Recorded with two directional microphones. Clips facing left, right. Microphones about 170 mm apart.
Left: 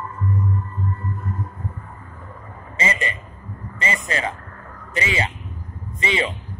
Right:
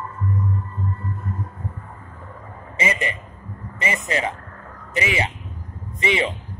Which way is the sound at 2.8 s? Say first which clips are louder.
Right 1 dB; 15° right (ahead or behind).